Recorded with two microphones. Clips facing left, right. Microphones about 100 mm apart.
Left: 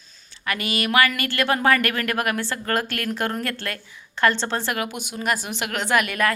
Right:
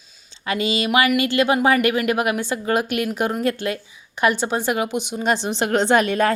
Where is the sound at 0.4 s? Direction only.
25° right (ahead or behind).